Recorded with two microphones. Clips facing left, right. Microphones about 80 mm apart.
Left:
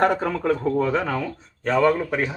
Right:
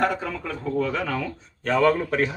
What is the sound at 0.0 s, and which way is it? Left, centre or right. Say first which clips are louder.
Speech: left 5 dB; left.